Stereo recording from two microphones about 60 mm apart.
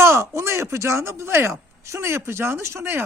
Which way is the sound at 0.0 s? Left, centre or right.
Right.